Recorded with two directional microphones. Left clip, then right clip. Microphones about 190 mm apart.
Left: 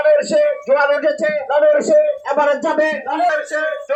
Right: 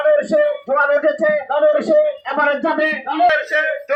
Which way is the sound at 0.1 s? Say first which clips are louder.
Left 1 dB; 30° left (ahead or behind).